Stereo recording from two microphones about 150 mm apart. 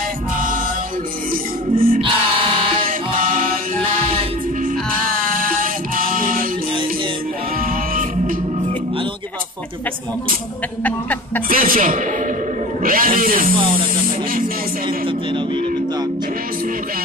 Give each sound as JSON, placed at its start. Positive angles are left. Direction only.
{"t": 1.3, "sound": "music", "side_deg": -70}
{"t": 3.3, "sound": "music", "side_deg": -65}
{"t": 5.3, "sound": "music", "side_deg": -65}
{"t": 7.6, "sound": "music", "side_deg": -70}
{"t": 10.8, "sound": "speech", "side_deg": 10}
{"t": 11.4, "sound": "speech", "side_deg": -70}
{"t": 13.6, "sound": "speech", "side_deg": -35}